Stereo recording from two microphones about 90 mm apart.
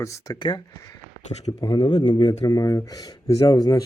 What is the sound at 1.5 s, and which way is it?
Speech, 45° left (ahead or behind).